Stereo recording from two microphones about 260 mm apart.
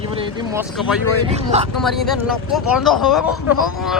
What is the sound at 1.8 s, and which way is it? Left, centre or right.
Speech, centre.